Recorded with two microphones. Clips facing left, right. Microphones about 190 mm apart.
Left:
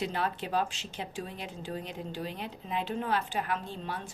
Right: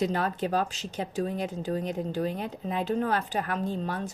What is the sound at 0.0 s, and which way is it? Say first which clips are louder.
A woman's voice: right 5 dB; 40° right (ahead or behind).